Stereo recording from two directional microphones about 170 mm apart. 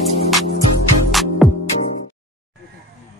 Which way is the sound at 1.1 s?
Centre (ahead or behind).